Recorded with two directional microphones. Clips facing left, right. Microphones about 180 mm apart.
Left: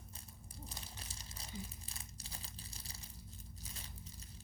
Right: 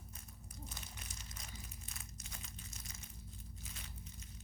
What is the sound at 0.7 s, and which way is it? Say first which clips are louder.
Crumpling: left 1 dB; 30° left (ahead or behind).